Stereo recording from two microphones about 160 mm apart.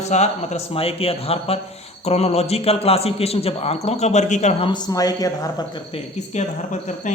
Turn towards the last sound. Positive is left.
turn(degrees=50)  # may be behind; listen again after turning